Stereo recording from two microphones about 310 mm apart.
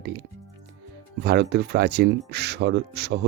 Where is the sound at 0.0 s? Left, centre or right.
Right.